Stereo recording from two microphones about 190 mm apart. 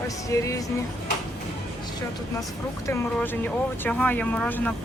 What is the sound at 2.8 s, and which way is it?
Speech, 10° left (ahead or behind).